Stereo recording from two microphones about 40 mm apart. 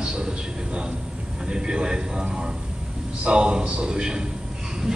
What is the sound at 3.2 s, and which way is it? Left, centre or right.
Speech, right.